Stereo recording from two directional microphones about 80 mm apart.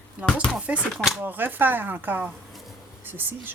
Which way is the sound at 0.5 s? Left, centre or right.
Centre.